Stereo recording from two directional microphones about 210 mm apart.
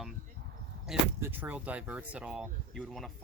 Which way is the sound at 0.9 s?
Centre (ahead or behind).